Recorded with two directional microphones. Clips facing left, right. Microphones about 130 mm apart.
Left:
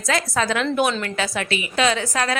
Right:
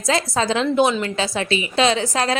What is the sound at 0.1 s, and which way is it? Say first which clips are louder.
A woman's voice: right 2 dB; 30° right (ahead or behind).